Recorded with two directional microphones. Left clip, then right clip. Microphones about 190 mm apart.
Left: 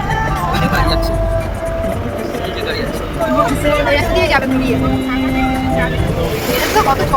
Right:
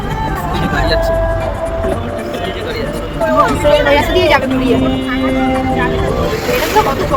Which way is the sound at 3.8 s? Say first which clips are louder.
Right 3 dB; 30° right (ahead or behind).